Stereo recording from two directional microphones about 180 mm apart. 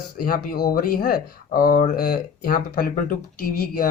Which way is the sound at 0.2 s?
55° left (ahead or behind).